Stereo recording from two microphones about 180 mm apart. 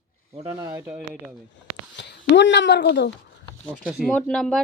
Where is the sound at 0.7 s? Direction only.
10° right (ahead or behind).